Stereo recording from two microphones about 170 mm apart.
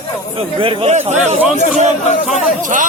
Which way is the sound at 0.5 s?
30° right (ahead or behind).